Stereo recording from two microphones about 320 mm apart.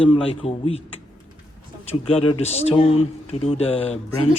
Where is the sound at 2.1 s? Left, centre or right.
Centre.